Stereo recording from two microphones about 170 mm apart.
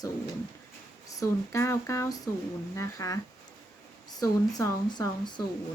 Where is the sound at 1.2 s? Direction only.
15° left (ahead or behind).